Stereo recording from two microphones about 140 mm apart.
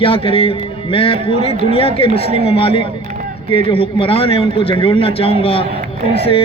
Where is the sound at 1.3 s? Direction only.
50° right (ahead or behind).